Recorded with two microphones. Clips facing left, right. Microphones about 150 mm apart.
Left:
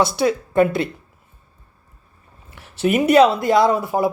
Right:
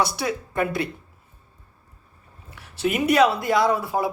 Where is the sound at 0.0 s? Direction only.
25° left (ahead or behind).